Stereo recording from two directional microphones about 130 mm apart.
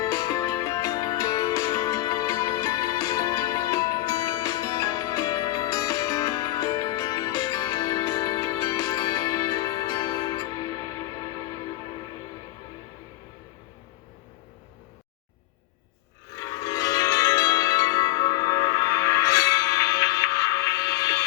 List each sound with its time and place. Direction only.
0.0 s music: 30° left (ahead or behind)
16.3 s music: 25° left (ahead or behind)